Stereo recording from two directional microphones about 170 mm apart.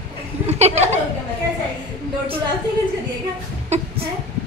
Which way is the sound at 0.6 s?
40° right (ahead or behind).